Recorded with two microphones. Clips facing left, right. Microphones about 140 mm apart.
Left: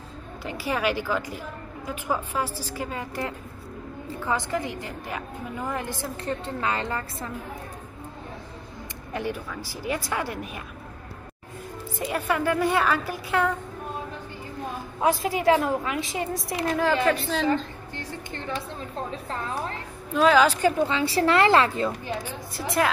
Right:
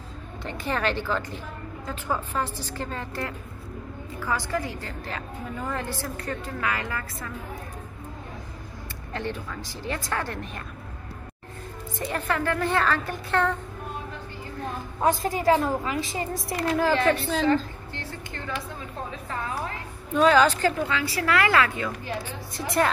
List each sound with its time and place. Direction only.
0.4 s a woman's voice: 5° left (ahead or behind); by 7.2 s 30° left (ahead or behind)
9.1 s speech: 10° left (ahead or behind)
12.1 s speech: 15° left (ahead or behind)
14.6 s a woman's voice: 5° left (ahead or behind)
20.2 s speech: 5° left (ahead or behind)
20.7 s a woman's voice: 25° left (ahead or behind)
22.0 s speech: 15° left (ahead or behind)
22.6 s a woman's voice: centre (ahead or behind)